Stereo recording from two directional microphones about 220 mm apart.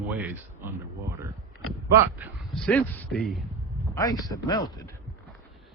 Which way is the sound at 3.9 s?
15° left (ahead or behind).